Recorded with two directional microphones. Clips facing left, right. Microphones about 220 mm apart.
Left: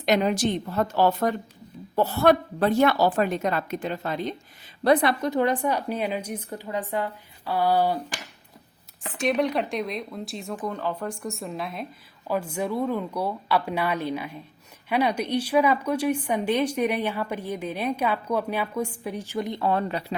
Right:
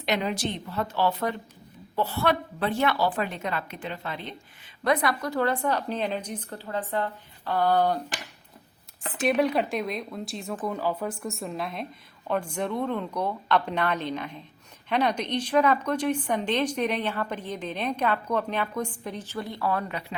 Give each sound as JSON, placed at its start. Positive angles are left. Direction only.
{"t": 0.0, "sound": "a woman's voice", "side_deg": 45}
{"t": 9.0, "sound": "a woman's voice", "side_deg": 0}